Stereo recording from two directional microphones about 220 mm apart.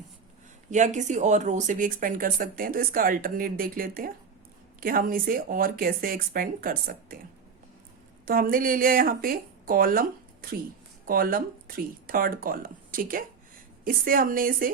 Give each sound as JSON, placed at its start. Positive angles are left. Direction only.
{"t": 0.7, "sound": "speech", "side_deg": -35}
{"t": 8.2, "sound": "a woman's voice", "side_deg": -40}